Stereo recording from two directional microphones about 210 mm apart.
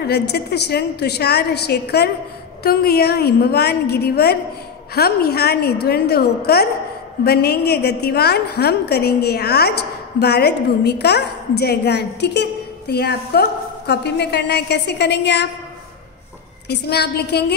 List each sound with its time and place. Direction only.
0.0 s a woman's voice: 50° left (ahead or behind)
16.6 s a woman's voice: 50° left (ahead or behind)